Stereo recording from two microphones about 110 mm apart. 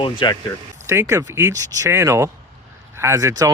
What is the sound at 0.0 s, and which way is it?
Speech, 45° left (ahead or behind).